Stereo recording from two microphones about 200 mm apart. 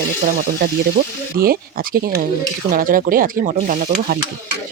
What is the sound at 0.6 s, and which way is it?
Speech, 50° right (ahead or behind).